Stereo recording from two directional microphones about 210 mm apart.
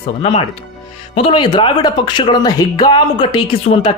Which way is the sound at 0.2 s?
25° left (ahead or behind).